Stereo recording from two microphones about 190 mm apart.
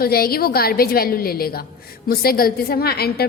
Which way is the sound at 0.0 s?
50° left (ahead or behind).